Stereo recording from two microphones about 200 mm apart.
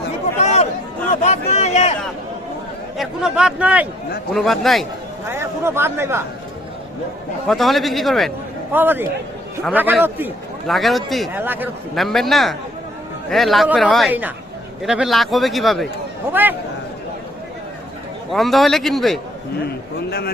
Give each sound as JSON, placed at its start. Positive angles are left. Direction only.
{"t": 0.3, "sound": "chatter", "side_deg": 30}
{"t": 1.1, "sound": "a sound", "side_deg": 35}
{"t": 3.0, "sound": "a man's voice", "side_deg": -5}
{"t": 5.3, "sound": "a man's voice", "side_deg": -10}
{"t": 7.4, "sound": "a man's voice", "side_deg": 0}
{"t": 8.7, "sound": "a man's voice", "side_deg": -10}
{"t": 11.9, "sound": "a man's voice", "side_deg": 0}
{"t": 18.3, "sound": "a man's voice", "side_deg": 0}
{"t": 19.6, "sound": "a man's voice", "side_deg": 50}